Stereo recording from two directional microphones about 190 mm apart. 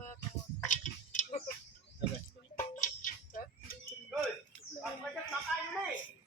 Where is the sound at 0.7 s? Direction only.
40° left (ahead or behind).